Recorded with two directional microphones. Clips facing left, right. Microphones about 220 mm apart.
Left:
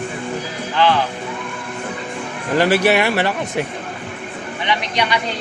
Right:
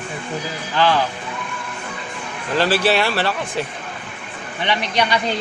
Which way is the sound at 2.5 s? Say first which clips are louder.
Left 3 dB; 15° left (ahead or behind).